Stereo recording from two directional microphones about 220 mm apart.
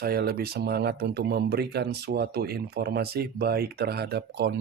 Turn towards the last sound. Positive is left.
turn(degrees=-50)  # may be behind; listen again after turning